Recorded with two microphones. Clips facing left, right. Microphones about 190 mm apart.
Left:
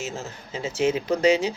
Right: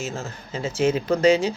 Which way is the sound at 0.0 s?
20° left (ahead or behind).